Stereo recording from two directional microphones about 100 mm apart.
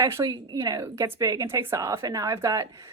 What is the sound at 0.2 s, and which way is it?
Speech, 30° right (ahead or behind).